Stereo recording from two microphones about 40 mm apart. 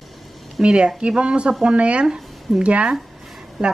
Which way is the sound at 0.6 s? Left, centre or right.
Right.